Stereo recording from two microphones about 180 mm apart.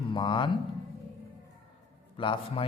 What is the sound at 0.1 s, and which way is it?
Speech, 25° left (ahead or behind).